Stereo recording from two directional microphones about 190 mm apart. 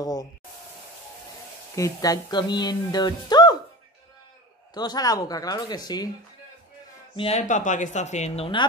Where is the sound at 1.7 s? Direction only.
15° left (ahead or behind).